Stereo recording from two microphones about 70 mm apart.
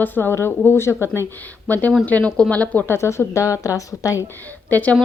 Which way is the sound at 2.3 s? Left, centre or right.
Centre.